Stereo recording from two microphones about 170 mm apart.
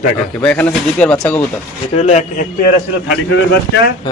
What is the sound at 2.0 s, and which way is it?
Speech, 40° left (ahead or behind).